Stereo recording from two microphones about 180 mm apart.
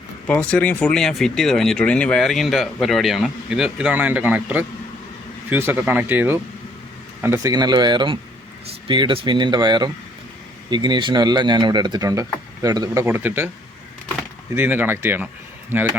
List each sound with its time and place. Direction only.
0.3 s speech: 5° left (ahead or behind); by 13.5 s 10° right (ahead or behind)
14.5 s speech: 10° right (ahead or behind)